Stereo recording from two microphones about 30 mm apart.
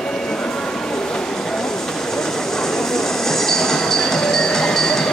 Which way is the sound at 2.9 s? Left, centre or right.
Centre.